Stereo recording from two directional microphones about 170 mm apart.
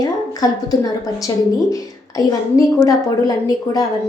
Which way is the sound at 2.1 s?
20° left (ahead or behind).